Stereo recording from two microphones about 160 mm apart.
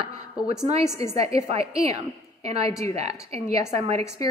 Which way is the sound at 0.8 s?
15° left (ahead or behind).